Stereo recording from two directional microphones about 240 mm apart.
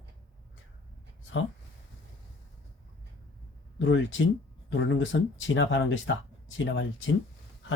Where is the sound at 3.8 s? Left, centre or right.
Left.